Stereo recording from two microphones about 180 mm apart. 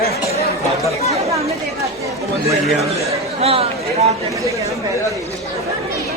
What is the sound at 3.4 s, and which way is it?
Speech, 35° right (ahead or behind).